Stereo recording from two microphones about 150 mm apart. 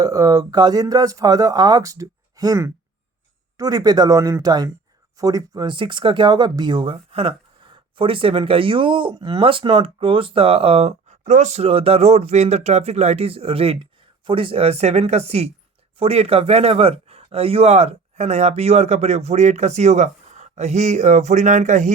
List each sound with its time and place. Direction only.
0.0 s speech: 25° right (ahead or behind); by 21.9 s 55° right (ahead or behind)